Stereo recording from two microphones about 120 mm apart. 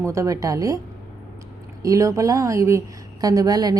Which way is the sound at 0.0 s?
25° right (ahead or behind).